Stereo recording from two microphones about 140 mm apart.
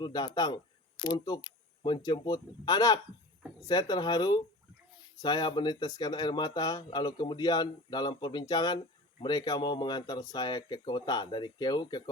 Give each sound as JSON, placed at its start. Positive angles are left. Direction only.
{"t": 0.0, "sound": "speech", "side_deg": 30}